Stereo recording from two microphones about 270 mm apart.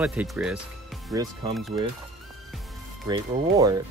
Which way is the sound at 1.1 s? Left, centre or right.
Centre.